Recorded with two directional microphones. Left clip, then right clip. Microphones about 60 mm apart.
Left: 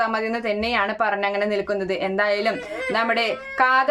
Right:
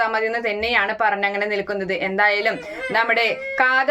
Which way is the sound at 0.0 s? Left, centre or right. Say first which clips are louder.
Right 2 dB; left.